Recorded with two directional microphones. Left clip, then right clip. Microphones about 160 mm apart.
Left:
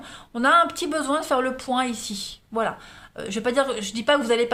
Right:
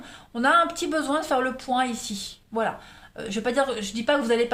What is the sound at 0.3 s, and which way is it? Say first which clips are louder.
A woman's voice: left 2 dB; 35° left (ahead or behind).